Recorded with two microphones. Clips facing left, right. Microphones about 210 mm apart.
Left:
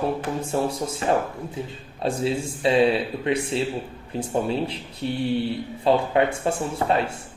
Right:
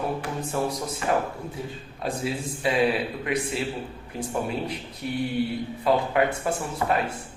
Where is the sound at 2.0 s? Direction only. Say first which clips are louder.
Left 5 dB; 25° left (ahead or behind).